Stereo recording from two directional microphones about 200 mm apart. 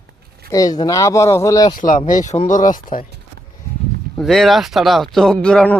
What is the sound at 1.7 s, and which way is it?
Speech, 40° left (ahead or behind).